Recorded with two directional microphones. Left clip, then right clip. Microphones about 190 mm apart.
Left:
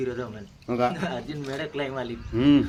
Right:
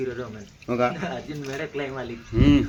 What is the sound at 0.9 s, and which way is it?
Speech, 35° left (ahead or behind).